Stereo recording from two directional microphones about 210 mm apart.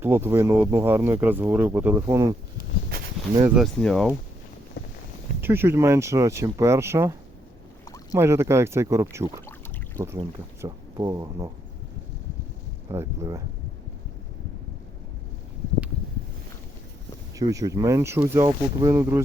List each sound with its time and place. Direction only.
0.0 s speech: 10° right (ahead or behind)
3.5 s speech: centre (ahead or behind)
4.8 s a sound: 55° left (ahead or behind)
5.4 s speech: 10° right (ahead or behind)
10.0 s speech: 10° left (ahead or behind)
10.6 s speech: 20° right (ahead or behind)
12.9 s speech: 15° right (ahead or behind)
17.3 s speech: 15° right (ahead or behind)